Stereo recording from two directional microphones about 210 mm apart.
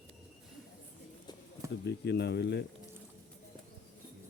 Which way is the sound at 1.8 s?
55° left (ahead or behind).